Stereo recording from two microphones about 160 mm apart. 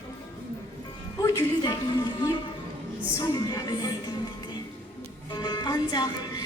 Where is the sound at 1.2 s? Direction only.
20° left (ahead or behind).